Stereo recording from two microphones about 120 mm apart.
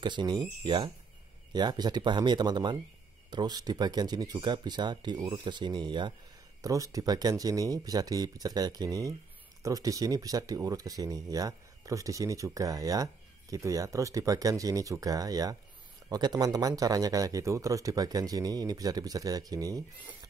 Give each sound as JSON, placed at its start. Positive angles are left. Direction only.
{"t": 0.0, "sound": "speech", "side_deg": -40}
{"t": 6.6, "sound": "speech", "side_deg": -30}